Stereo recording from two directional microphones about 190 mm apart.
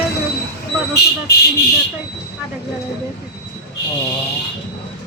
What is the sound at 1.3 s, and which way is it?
Speech, 55° left (ahead or behind).